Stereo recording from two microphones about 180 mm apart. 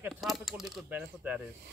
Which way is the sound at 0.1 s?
Centre (ahead or behind).